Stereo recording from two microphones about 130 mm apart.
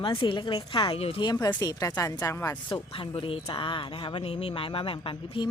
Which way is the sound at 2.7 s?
40° left (ahead or behind).